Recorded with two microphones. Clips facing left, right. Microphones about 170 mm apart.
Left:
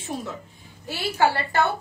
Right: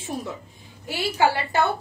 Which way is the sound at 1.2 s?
15° right (ahead or behind).